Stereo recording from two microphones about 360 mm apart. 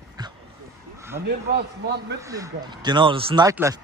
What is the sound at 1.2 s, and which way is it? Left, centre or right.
Speech, right.